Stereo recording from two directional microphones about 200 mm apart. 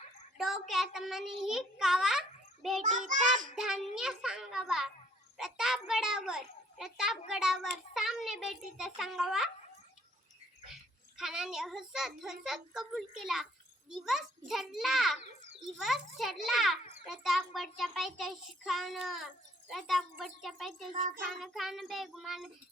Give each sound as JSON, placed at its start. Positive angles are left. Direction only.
{"t": 0.3, "sound": "a sound", "side_deg": 0}
{"t": 0.7, "sound": "a child's voice", "side_deg": 0}
{"t": 11.2, "sound": "a child's voice", "side_deg": -5}